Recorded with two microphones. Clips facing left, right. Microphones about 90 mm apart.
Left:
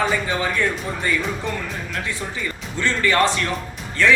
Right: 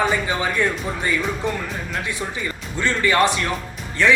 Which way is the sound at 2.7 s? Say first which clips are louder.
Right 1 dB; 15° right (ahead or behind).